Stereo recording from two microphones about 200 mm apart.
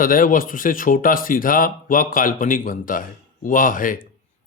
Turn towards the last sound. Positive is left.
turn(degrees=45)  # may be behind; listen again after turning